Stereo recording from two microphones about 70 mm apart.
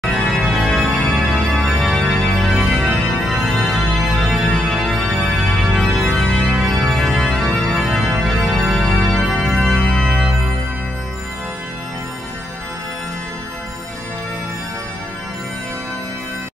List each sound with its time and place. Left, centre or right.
0.0 s organ: centre
3.3 s music: centre
10.0 s music: centre